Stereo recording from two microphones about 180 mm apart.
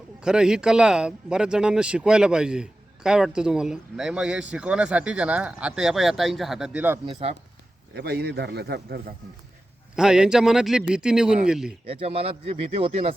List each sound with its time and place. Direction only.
0.2 s speech: 5° right (ahead or behind)
7.1 s speech: 35° right (ahead or behind)
7.9 s a man's voice: 65° right (ahead or behind)
9.9 s speech: 5° right (ahead or behind)
11.9 s speech: 30° right (ahead or behind)